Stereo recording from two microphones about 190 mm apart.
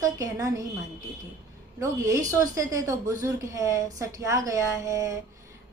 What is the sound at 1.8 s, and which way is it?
A woman's voice, 15° right (ahead or behind).